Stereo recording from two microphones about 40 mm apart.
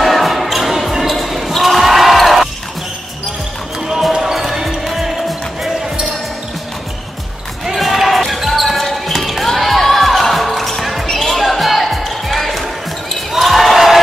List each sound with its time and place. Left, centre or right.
0.0 s basketball bounce: centre
4.2 s basketball bounce: centre
7.6 s basketball bounce: centre
11.1 s music: centre
13.3 s basketball bounce: centre